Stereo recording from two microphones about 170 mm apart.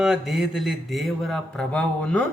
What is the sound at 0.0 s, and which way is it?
A man's voice, centre (ahead or behind).